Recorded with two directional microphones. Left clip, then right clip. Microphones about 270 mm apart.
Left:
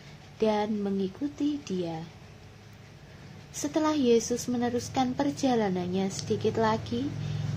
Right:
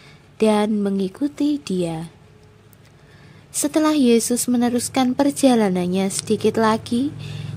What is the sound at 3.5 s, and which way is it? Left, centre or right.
A woman's voice, right.